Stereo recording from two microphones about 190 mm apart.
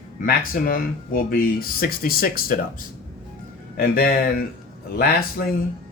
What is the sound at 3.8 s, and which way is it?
Speech, 50° left (ahead or behind).